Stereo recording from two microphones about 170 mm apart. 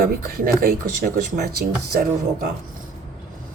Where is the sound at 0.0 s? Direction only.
60° right (ahead or behind).